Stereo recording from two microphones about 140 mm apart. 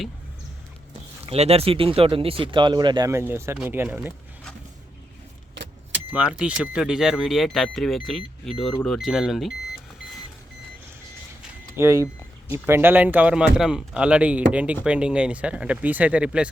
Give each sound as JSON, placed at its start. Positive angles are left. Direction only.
{"t": 1.2, "sound": "speech", "side_deg": -45}
{"t": 3.1, "sound": "speech", "side_deg": -20}
{"t": 6.1, "sound": "speech", "side_deg": -5}
{"t": 11.8, "sound": "speech", "side_deg": -25}